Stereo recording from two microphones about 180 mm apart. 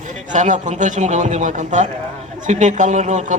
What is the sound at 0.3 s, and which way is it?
A man's voice, 45° right (ahead or behind).